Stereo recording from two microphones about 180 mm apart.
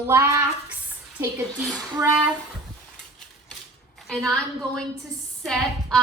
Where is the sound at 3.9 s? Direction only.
Centre (ahead or behind).